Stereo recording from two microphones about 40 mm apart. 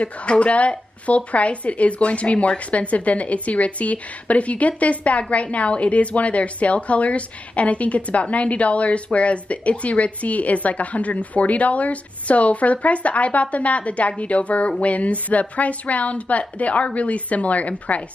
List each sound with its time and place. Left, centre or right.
0.0 s a woman's voice: left